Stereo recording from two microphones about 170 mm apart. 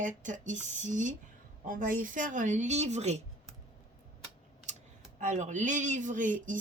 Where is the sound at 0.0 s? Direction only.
50° right (ahead or behind).